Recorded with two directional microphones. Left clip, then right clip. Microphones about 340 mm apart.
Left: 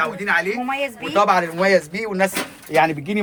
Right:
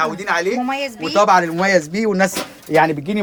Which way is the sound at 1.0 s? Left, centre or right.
Centre.